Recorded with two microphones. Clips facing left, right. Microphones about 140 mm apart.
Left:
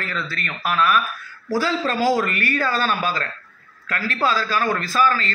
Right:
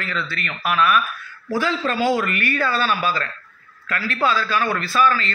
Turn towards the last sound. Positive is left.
turn(degrees=40)  # may be behind; listen again after turning